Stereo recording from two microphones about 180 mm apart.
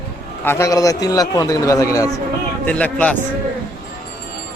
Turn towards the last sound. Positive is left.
turn(degrees=5)  # may be behind; listen again after turning